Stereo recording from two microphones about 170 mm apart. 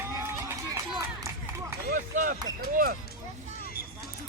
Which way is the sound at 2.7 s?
55° right (ahead or behind).